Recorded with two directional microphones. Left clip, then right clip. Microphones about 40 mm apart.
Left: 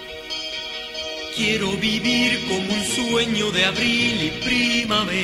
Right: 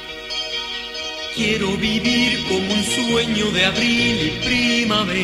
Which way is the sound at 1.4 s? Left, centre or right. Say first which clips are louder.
Right 1 dB; left.